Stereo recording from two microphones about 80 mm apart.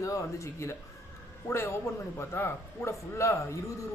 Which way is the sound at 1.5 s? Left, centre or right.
Left.